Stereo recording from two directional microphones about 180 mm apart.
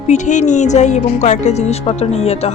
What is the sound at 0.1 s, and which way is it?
Speech, 40° left (ahead or behind).